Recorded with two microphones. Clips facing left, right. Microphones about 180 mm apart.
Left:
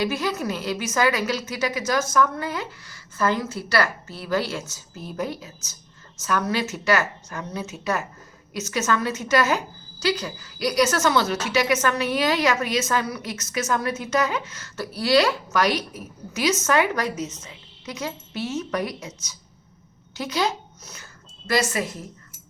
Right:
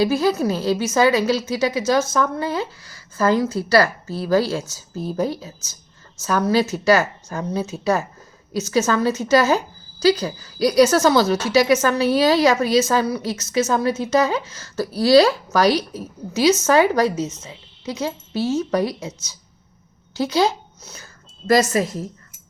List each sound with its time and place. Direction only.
0.0 s a woman's voice: 30° right (ahead or behind)